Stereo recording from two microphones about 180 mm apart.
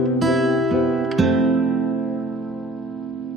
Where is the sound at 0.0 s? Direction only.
Centre (ahead or behind).